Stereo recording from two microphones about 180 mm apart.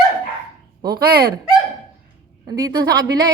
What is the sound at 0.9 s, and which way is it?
Speech, 60° right (ahead or behind).